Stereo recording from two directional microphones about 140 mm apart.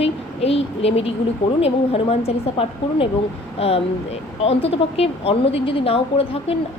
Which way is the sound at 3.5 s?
45° left (ahead or behind).